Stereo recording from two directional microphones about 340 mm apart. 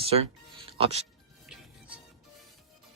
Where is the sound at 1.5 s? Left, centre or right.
Centre.